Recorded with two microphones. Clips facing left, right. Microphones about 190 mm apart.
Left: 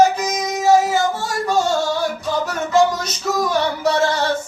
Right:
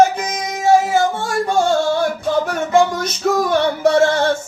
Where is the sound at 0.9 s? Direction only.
55° right (ahead or behind).